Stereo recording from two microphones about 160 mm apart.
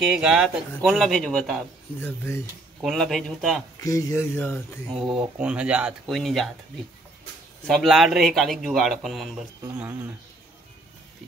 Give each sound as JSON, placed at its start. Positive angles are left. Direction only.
{"t": 0.2, "sound": "a man's voice", "side_deg": -5}
{"t": 2.0, "sound": "speech", "side_deg": 15}
{"t": 2.8, "sound": "a man's voice", "side_deg": 0}
{"t": 3.8, "sound": "speech", "side_deg": 20}
{"t": 5.1, "sound": "a man's voice", "side_deg": -5}
{"t": 7.6, "sound": "a man's voice", "side_deg": 0}
{"t": 9.6, "sound": "speech", "side_deg": -15}